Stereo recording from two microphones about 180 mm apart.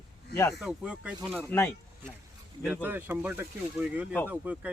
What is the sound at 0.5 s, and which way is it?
Speech, 5° right (ahead or behind).